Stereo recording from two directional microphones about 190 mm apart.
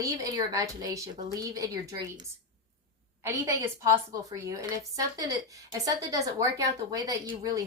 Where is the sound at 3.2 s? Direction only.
15° right (ahead or behind).